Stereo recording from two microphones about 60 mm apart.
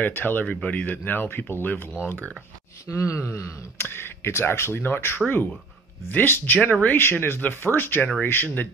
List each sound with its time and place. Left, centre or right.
0.0 s speech: left
0.5 s speech: left
2.9 s groan: left
3.7 s speech: left